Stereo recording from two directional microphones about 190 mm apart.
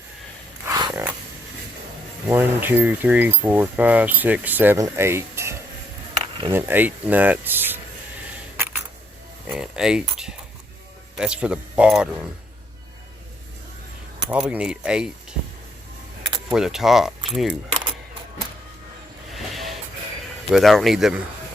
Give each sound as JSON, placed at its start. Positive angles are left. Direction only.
{"t": 0.6, "sound": "a sound", "side_deg": -20}
{"t": 2.2, "sound": "speech", "side_deg": -10}
{"t": 9.5, "sound": "speech", "side_deg": -5}
{"t": 14.3, "sound": "speech", "side_deg": -5}
{"t": 16.5, "sound": "speech", "side_deg": -5}
{"t": 19.3, "sound": "a sound", "side_deg": 0}
{"t": 20.5, "sound": "speech", "side_deg": 0}